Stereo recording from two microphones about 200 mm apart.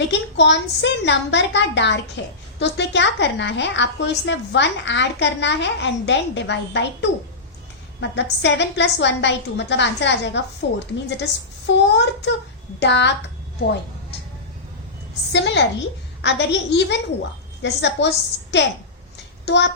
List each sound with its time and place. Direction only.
0.1 s a woman's voice: 60° left (ahead or behind)
8.1 s a woman's voice: 60° left (ahead or behind)
15.3 s a woman's voice: 60° left (ahead or behind)
19.5 s a woman's voice: 60° left (ahead or behind)